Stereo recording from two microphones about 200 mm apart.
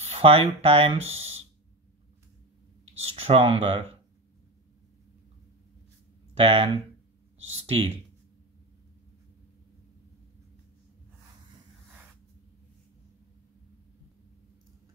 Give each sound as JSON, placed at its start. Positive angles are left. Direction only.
{"t": 0.0, "sound": "speech", "side_deg": -30}
{"t": 3.0, "sound": "speech", "side_deg": -30}
{"t": 6.3, "sound": "speech", "side_deg": -30}
{"t": 7.5, "sound": "a sound", "side_deg": -30}